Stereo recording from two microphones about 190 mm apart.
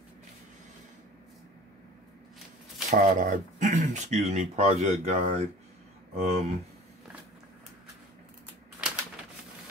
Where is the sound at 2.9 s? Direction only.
40° right (ahead or behind).